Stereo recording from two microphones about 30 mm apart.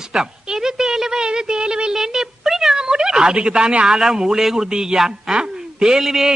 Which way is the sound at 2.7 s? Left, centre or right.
Right.